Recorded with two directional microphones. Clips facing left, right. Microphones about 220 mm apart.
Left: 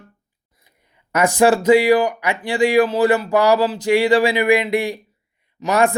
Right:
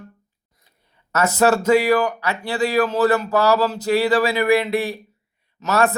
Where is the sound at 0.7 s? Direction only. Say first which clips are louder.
Left 2 dB; 15° left (ahead or behind).